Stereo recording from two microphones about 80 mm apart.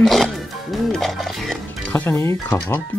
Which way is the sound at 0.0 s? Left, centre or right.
Centre.